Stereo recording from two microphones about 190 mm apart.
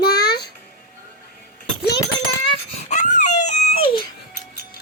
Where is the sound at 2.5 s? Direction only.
35° left (ahead or behind).